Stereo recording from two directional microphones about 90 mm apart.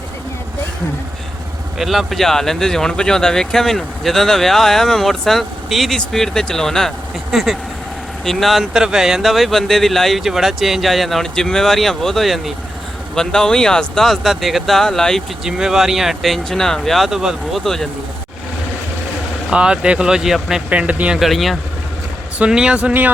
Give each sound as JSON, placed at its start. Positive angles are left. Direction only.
{"t": 1.8, "sound": "speech", "side_deg": 0}
{"t": 15.4, "sound": "speech", "side_deg": -5}
{"t": 19.5, "sound": "speech", "side_deg": -10}
{"t": 20.7, "sound": "speech", "side_deg": -15}
{"t": 21.2, "sound": "speech", "side_deg": 0}